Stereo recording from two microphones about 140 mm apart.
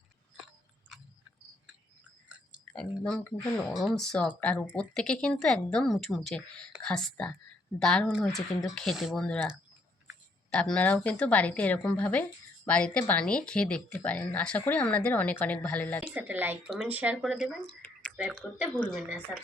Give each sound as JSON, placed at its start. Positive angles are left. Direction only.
{"t": 2.7, "sound": "speech", "side_deg": 5}
{"t": 10.5, "sound": "speech", "side_deg": 5}
{"t": 16.1, "sound": "speech", "side_deg": -15}
{"t": 17.8, "sound": "a sound", "side_deg": 10}
{"t": 18.2, "sound": "speech", "side_deg": -10}